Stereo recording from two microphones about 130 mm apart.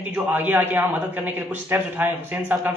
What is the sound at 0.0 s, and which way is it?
A man's voice, 15° right (ahead or behind).